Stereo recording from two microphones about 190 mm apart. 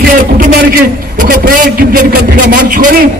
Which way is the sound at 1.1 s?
45° right (ahead or behind).